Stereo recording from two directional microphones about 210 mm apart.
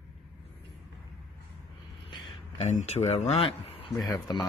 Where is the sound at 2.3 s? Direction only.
30° left (ahead or behind).